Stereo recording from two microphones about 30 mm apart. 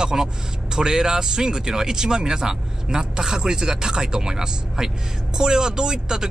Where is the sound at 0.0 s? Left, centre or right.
Right.